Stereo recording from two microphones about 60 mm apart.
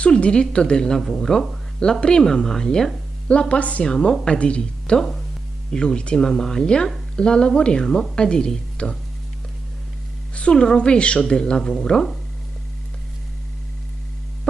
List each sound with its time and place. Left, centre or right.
0.0 s a woman's voice: centre
3.8 s a woman's voice: centre
10.3 s a woman's voice: centre